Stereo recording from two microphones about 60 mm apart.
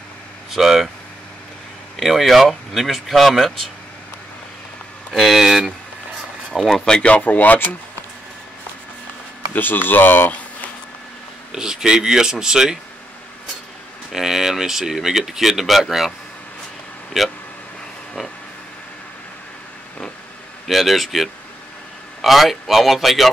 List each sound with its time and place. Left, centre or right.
0.5 s speech: centre
2.0 s speech: centre
5.1 s speech: centre
6.8 s speech: centre
9.5 s speech: left
11.5 s speech: centre
14.1 s speech: centre
17.1 s speech: centre
20.6 s speech: centre